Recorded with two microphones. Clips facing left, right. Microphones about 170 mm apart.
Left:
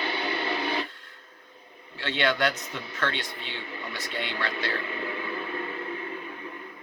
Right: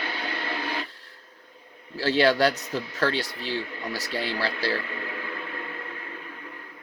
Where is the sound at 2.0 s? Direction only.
35° right (ahead or behind).